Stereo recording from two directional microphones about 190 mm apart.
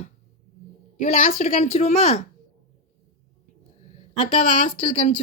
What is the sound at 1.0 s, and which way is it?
Speech, 45° left (ahead or behind).